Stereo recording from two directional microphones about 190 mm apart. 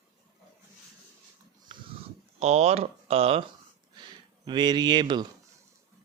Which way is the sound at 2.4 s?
35° right (ahead or behind).